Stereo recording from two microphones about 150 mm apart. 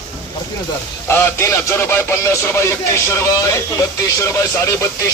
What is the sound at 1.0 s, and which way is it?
Speech, 15° left (ahead or behind).